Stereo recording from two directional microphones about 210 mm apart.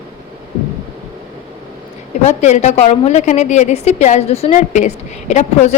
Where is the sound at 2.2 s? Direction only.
35° left (ahead or behind).